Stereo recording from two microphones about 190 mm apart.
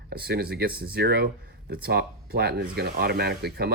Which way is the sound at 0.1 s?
55° right (ahead or behind).